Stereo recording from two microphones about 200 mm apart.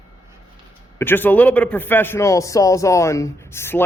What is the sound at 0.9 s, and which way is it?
A man's voice, 10° left (ahead or behind).